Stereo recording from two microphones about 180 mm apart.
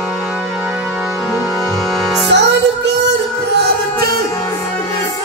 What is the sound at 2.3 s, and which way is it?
Music, 75° right (ahead or behind).